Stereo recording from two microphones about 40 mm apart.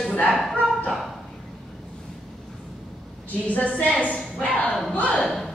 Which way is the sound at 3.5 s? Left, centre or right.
Left.